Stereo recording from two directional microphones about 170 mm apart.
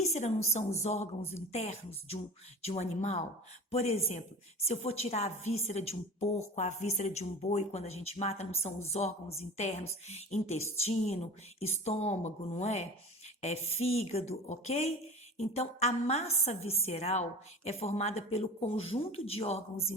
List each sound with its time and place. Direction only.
0.0 s a woman's voice: 40° left (ahead or behind)